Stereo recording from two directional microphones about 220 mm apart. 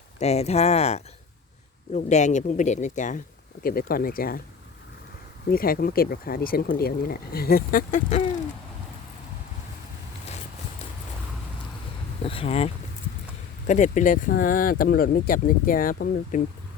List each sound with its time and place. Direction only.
0.2 s speech: 30° left (ahead or behind)
5.5 s speech: 40° left (ahead or behind)
12.2 s a sound: 25° left (ahead or behind)
13.7 s speech: 35° left (ahead or behind)